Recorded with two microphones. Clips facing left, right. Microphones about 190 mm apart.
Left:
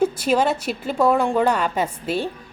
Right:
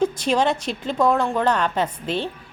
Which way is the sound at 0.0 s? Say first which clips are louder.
Left 1 dB; 5° left (ahead or behind).